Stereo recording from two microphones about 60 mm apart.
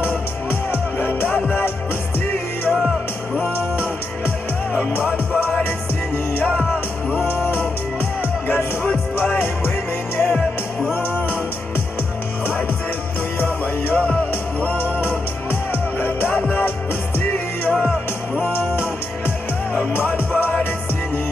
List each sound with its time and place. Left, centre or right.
0.0 s music: left
2.7 s music: centre
8.8 s music: left
10.2 s music: centre
13.4 s music: left
16.0 s music: left
19.9 s music: left